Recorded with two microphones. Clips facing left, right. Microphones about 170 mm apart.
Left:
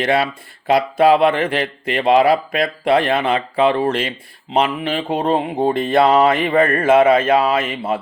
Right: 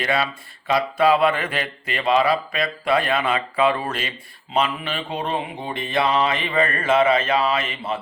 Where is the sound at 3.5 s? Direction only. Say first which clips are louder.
Left 6 dB; 30° left (ahead or behind).